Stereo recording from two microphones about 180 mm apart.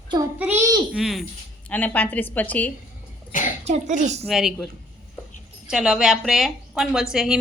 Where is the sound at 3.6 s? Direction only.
40° right (ahead or behind).